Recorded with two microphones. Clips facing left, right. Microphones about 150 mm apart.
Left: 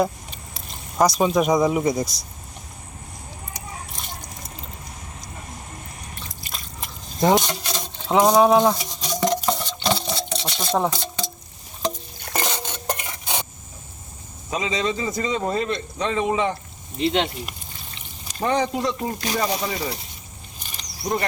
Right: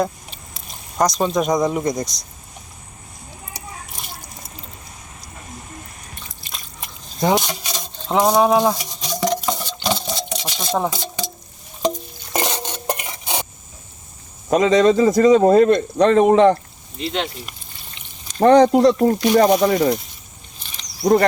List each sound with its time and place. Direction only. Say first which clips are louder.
0.9 s speech: even; 5° left (ahead or behind)
6.5 s a sound: right 1 dB; centre (ahead or behind)
9.2 s a sound: right 1 dB; centre (ahead or behind)
12.3 s stir: right 4 dB; 15° right (ahead or behind)
14.5 s speech: right 11 dB; 70° right (ahead or behind)
17.0 s speech: left 3 dB; 25° left (ahead or behind)
18.0 s pour: left 2 dB; centre (ahead or behind)
18.3 s speech: right 11 dB; 70° right (ahead or behind)